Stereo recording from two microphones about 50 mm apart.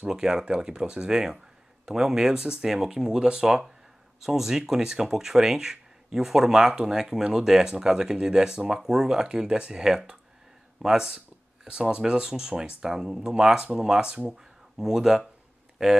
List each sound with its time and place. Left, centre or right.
0.0 s speech: centre